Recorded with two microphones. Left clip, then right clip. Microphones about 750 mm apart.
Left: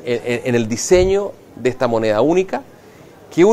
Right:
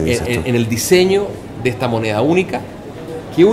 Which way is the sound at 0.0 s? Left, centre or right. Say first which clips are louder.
Right 2 dB; left.